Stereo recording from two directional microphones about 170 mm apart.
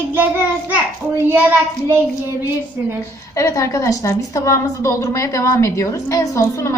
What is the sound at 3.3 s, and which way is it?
A woman's voice, 20° left (ahead or behind).